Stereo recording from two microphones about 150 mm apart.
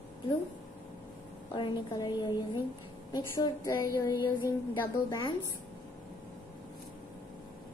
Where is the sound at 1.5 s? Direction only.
25° left (ahead or behind).